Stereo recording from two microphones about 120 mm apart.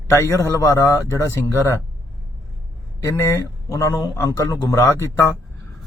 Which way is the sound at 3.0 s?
25° left (ahead or behind).